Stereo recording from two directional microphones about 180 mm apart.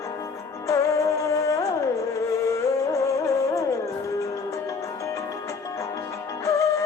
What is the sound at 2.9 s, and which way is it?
Music, 15° left (ahead or behind).